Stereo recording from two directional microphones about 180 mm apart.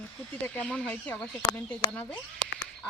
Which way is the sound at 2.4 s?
35° right (ahead or behind).